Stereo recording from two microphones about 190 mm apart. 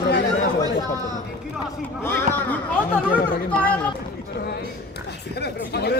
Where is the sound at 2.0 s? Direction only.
10° left (ahead or behind).